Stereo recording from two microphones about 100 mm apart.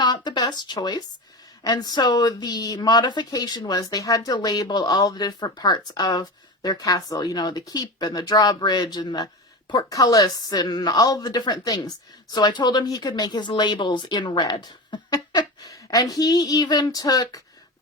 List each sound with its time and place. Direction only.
0.0 s speech: 45° left (ahead or behind)